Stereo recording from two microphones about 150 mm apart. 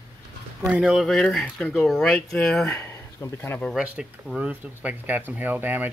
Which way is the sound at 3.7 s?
5° right (ahead or behind).